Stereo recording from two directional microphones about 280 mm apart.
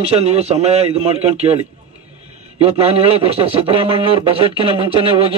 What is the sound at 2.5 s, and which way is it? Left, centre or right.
Speech, right.